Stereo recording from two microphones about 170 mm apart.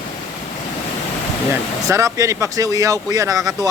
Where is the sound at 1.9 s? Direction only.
20° right (ahead or behind).